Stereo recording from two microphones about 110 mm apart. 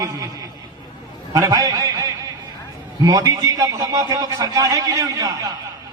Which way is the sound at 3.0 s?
35° right (ahead or behind).